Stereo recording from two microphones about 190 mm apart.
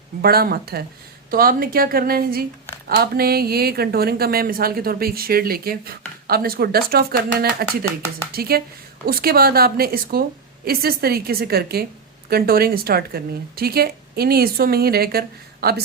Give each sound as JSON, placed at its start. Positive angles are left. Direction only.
{"t": 0.2, "sound": "speech", "side_deg": -55}